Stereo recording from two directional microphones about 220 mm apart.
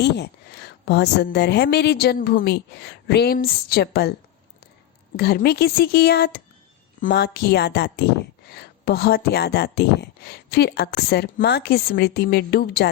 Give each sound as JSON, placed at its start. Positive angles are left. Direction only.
{"t": 0.0, "sound": "speech", "side_deg": 50}
{"t": 5.1, "sound": "speech", "side_deg": 45}